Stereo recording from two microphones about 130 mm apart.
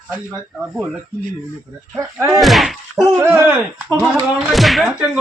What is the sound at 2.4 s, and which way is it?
Speech, centre (ahead or behind).